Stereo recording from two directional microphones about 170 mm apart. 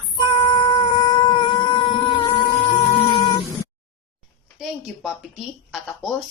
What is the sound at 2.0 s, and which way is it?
Cat, 25° left (ahead or behind).